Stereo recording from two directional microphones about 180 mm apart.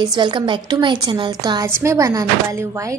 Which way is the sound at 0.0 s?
25° right (ahead or behind).